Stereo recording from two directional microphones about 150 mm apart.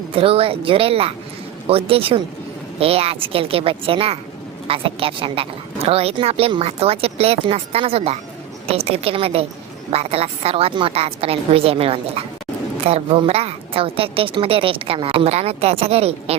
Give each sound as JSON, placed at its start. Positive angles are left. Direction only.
{"t": 0.1, "sound": "a woman's voice", "side_deg": -40}